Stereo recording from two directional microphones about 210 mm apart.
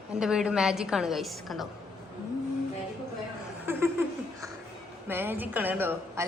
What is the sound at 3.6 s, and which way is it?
Laughter, 10° right (ahead or behind).